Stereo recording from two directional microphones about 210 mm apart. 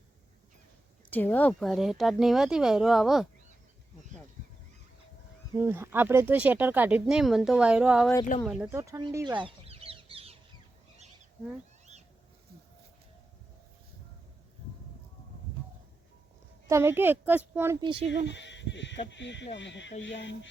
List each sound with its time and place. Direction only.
1.1 s speech: 10° left (ahead or behind)
5.5 s speech: 10° right (ahead or behind)
9.4 s chicken: 30° right (ahead or behind)
16.6 s speech: 10° right (ahead or behind)
18.3 s speech: 55° left (ahead or behind)
19.5 s a sound: 60° left (ahead or behind)